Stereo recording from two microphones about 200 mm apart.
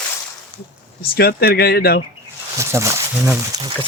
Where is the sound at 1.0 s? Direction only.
50° left (ahead or behind).